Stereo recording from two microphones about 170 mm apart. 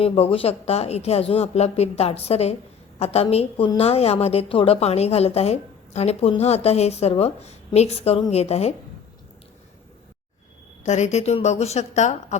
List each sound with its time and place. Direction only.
0.0 s a woman's voice: 35° left (ahead or behind)
10.8 s a woman's voice: 40° left (ahead or behind)